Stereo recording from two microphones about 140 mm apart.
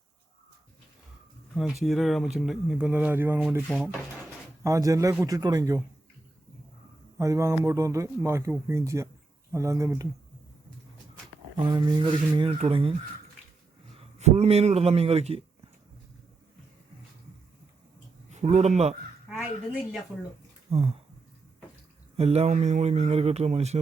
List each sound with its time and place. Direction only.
1.5 s speech: centre (ahead or behind)
4.6 s a man's voice: 25° right (ahead or behind)
7.2 s a man's voice: 20° right (ahead or behind)
11.6 s speech: 30° right (ahead or behind)
12.5 s a man's voice: 45° right (ahead or behind)
18.3 s speech: 55° right (ahead or behind)
19.3 s a woman's voice: 5° right (ahead or behind)
20.7 s speech: 45° right (ahead or behind)
22.2 s speech: 50° right (ahead or behind)